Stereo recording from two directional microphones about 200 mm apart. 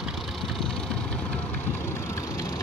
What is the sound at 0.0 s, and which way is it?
Vehicle, centre (ahead or behind).